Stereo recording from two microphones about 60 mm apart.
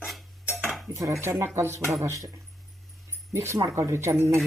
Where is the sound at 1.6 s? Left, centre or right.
Right.